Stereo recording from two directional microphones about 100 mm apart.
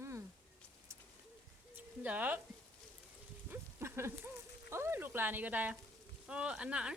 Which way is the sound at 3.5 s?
25° right (ahead or behind).